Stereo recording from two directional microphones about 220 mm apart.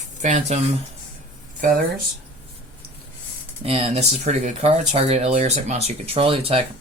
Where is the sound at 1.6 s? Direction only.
40° right (ahead or behind).